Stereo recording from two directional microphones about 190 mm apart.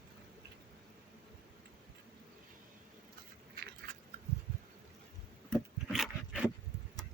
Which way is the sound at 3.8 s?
55° right (ahead or behind).